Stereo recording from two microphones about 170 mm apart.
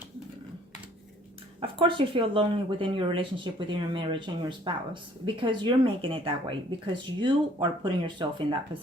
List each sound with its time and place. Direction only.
1.6 s speech: 30° right (ahead or behind)